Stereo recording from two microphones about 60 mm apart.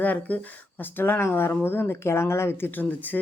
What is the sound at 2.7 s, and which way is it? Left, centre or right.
Speech, left.